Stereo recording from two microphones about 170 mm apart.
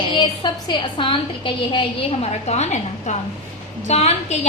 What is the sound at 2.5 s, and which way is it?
Speech, 40° left (ahead or behind).